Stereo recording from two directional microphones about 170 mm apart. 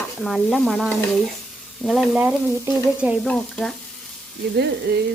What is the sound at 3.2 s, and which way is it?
Stir, 5° left (ahead or behind).